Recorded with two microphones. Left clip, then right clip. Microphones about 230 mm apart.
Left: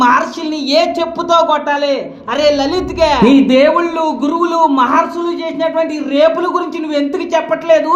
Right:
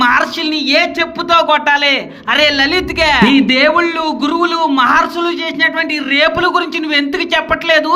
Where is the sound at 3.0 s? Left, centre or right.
Right.